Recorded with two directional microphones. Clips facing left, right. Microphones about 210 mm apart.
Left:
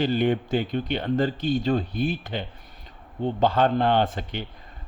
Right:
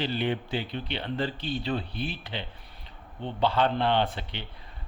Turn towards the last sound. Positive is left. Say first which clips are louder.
# left 4 dB
turn(degrees=45)  # may be behind; listen again after turning